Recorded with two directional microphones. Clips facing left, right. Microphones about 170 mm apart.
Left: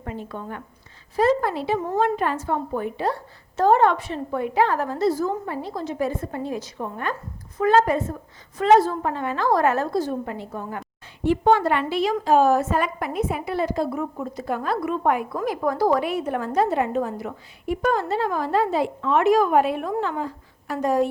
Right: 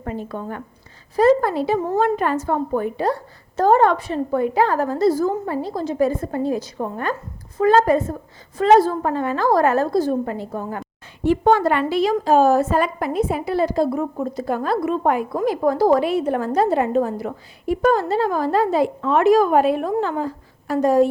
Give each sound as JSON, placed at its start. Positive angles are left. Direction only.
{"t": 0.0, "sound": "a woman's voice", "side_deg": -45}